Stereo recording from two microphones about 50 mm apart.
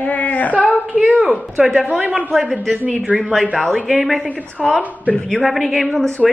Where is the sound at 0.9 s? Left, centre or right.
Right.